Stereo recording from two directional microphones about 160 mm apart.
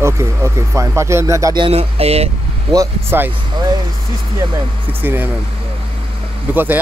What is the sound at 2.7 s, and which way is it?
Speech, 15° right (ahead or behind).